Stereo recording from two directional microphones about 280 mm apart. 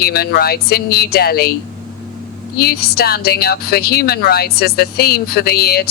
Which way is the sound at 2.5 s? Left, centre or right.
Left.